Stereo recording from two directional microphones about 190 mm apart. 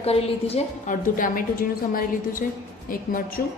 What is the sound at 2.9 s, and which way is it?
Speech, 50° left (ahead or behind).